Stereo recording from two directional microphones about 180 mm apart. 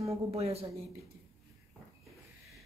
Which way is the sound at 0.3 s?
35° right (ahead or behind).